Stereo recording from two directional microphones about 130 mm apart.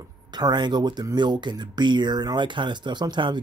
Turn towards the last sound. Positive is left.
turn(degrees=-35)  # may be behind; listen again after turning